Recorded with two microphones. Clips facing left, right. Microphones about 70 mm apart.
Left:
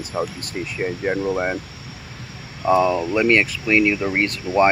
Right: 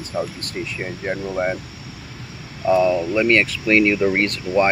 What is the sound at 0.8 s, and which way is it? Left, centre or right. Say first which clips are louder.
Speech: left 6 dB; centre.